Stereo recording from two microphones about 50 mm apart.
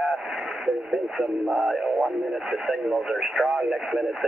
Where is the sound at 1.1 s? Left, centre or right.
Centre.